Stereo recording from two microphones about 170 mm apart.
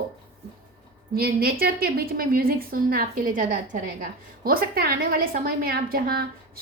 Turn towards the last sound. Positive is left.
turn(degrees=-60)  # may be behind; listen again after turning